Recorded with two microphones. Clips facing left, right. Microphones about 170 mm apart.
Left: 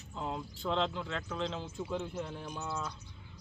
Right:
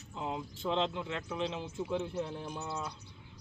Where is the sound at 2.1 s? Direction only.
25° right (ahead or behind).